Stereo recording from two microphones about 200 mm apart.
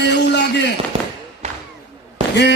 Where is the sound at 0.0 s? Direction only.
60° left (ahead or behind).